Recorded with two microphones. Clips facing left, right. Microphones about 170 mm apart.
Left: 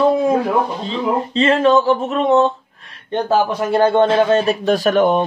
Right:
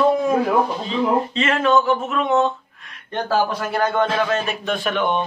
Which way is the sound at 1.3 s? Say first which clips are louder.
Left 8 dB; 30° left (ahead or behind).